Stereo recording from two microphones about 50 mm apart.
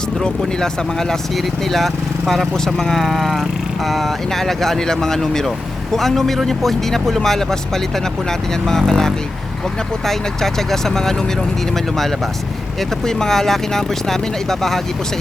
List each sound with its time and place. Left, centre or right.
0.6 s speech: centre